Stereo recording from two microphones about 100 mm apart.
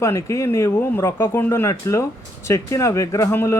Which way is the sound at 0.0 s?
30° left (ahead or behind).